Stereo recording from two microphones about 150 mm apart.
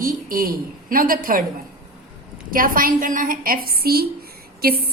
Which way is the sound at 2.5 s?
70° right (ahead or behind).